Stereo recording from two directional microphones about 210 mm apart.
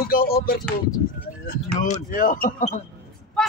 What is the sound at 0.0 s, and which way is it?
Music, 45° left (ahead or behind).